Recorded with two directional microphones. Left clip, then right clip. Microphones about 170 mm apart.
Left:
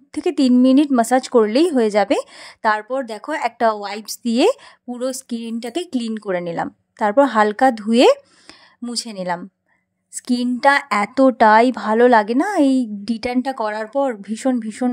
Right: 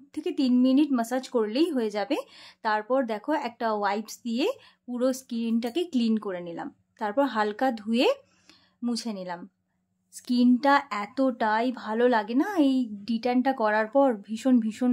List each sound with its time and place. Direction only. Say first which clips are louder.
0.1 s speech: left 9 dB; 45° left (ahead or behind)